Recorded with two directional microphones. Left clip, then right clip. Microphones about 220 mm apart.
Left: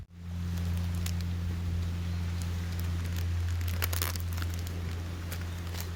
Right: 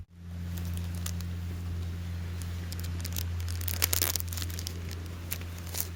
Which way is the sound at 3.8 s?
35° right (ahead or behind).